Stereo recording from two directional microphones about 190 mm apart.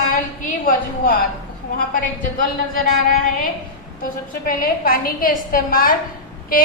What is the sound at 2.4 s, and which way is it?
A woman's voice, 45° left (ahead or behind).